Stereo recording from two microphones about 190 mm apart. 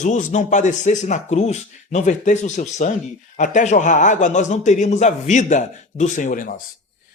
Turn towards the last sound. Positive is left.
turn(degrees=45)  # may be behind; listen again after turning